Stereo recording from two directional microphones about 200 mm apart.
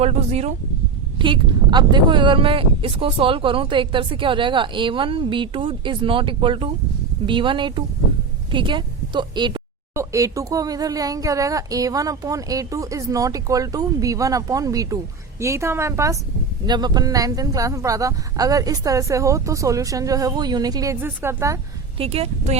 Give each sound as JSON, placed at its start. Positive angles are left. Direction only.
{"t": 0.0, "sound": "a woman's voice", "side_deg": -30}
{"t": 21.9, "sound": "speech", "side_deg": -30}